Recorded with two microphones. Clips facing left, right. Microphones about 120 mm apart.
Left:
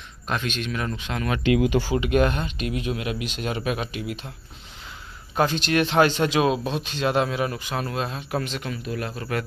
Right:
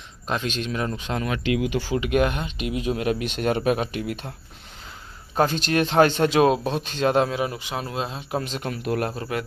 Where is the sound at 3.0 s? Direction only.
40° right (ahead or behind).